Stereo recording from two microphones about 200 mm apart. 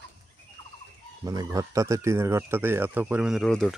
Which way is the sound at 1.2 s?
15° right (ahead or behind).